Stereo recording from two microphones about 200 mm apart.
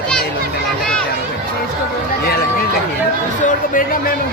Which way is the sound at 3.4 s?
40° left (ahead or behind).